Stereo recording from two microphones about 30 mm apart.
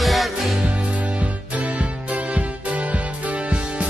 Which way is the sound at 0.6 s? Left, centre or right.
Right.